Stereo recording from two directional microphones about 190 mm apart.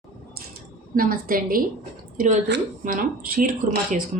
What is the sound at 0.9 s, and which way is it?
A woman's voice, 50° right (ahead or behind).